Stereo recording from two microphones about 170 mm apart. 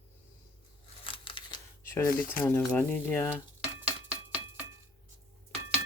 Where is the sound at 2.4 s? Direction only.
10° left (ahead or behind).